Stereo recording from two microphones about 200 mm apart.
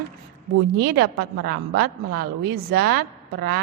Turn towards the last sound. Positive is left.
turn(degrees=-50)  # may be behind; listen again after turning